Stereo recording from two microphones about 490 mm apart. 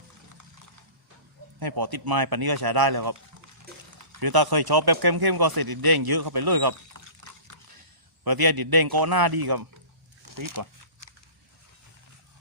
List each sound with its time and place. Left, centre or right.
1.5 s a man's voice: right